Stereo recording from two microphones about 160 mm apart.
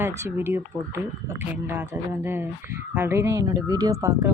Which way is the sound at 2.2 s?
15° right (ahead or behind).